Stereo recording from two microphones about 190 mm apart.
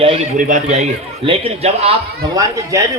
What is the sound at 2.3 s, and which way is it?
Speech, 15° right (ahead or behind).